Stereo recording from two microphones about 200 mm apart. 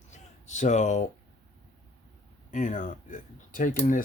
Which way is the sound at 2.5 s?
40° left (ahead or behind).